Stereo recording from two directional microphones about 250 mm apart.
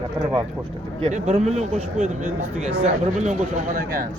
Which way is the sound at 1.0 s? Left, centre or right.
Right.